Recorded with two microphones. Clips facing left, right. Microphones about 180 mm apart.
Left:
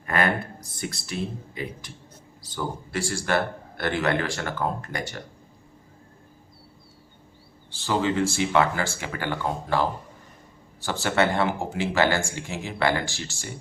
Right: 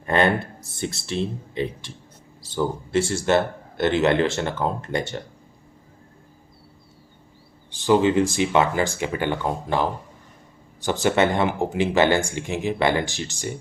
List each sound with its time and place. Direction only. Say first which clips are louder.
0.0 s a man's voice: right 5 dB; 25° right (ahead or behind)
7.7 s a man's voice: right 7 dB; 20° right (ahead or behind)